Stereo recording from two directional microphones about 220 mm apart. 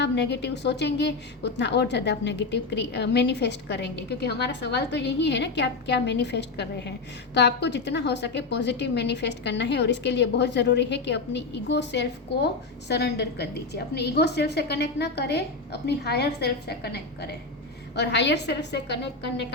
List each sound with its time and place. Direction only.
0.0 s a woman's voice: 50° left (ahead or behind)